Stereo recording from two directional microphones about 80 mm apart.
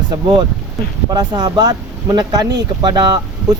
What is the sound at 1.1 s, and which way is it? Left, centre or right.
Speech, right.